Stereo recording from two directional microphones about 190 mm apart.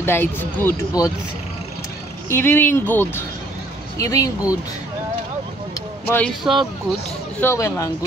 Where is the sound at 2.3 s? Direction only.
10° left (ahead or behind).